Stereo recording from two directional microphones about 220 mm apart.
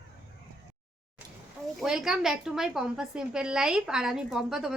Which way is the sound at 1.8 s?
Centre (ahead or behind).